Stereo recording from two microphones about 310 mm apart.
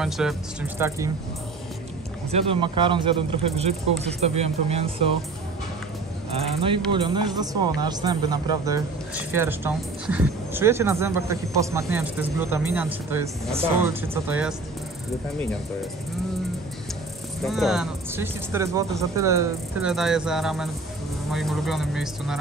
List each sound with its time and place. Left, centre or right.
0.0 s speech: centre
2.3 s speech: centre
6.3 s speech: centre
17.5 s speech: centre